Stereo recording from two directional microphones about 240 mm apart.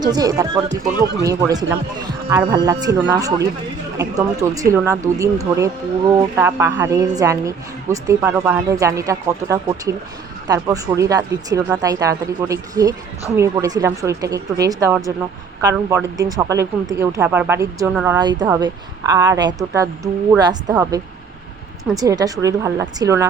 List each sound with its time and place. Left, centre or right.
0.0 s speech: centre